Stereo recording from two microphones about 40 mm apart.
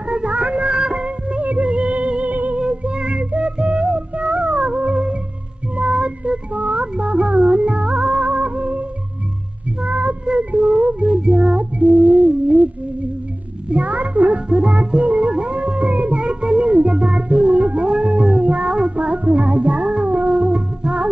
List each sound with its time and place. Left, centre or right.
0.1 s music: right
1.4 s music: right
2.3 s music: right
2.6 s music: right
9.8 s cat: right
10.2 s a sound: right
11.1 s music: right
13.7 s music: right
14.5 s music: right
16.2 s music: right
17.8 s howl: right
18.4 s child singing: right
18.7 s child singing: right
18.9 s music: right